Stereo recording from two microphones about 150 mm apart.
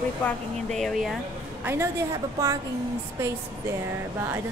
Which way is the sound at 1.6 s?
20° right (ahead or behind).